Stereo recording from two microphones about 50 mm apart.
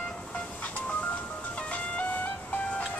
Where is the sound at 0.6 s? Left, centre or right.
Left.